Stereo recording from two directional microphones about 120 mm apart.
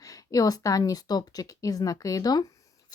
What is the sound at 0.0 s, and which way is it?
Speech, 30° left (ahead or behind).